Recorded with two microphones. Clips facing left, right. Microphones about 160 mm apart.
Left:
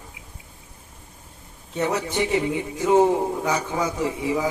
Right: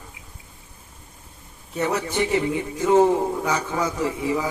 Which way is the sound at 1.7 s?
15° left (ahead or behind).